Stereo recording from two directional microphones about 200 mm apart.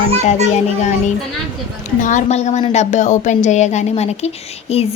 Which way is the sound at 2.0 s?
40° left (ahead or behind).